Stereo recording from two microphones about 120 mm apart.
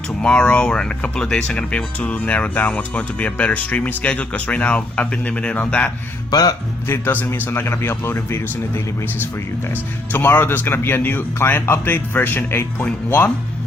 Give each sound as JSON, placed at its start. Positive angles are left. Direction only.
{"t": 0.2, "sound": "speech", "side_deg": 10}
{"t": 6.3, "sound": "speech", "side_deg": 30}
{"t": 6.8, "sound": "speech", "side_deg": 15}
{"t": 10.1, "sound": "speech", "side_deg": 15}